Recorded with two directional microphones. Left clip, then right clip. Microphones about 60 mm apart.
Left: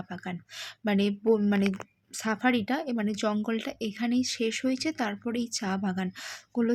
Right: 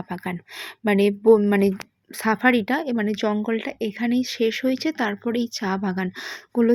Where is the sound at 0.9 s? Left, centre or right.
Right.